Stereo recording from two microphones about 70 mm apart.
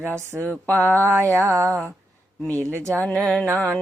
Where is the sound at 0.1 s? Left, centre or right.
Right.